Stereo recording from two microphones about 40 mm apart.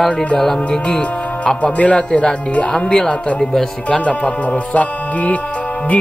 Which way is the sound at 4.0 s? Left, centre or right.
Left.